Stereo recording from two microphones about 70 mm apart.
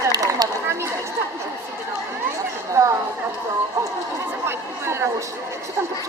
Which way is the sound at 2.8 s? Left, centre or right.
Right.